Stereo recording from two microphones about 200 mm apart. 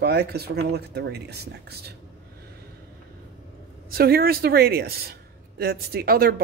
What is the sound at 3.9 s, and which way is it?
A woman's voice, 50° right (ahead or behind).